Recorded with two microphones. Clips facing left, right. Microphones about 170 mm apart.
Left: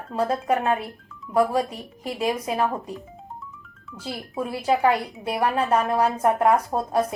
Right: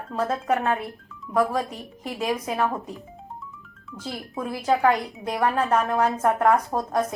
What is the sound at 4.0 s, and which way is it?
Speech, 5° left (ahead or behind).